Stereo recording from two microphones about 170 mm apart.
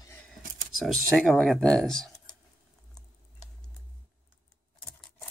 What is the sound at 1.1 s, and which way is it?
Speech, 5° left (ahead or behind).